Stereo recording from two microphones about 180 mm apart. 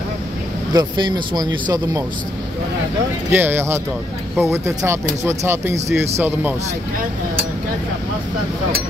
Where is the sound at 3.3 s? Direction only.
10° right (ahead or behind).